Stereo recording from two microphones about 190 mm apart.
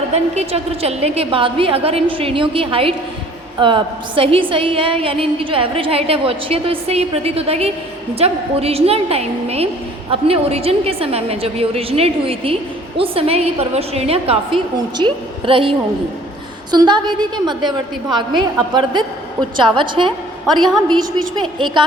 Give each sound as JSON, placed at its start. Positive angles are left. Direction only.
{"t": 0.1, "sound": "a woman's voice", "side_deg": -35}
{"t": 16.7, "sound": "a woman's voice", "side_deg": -20}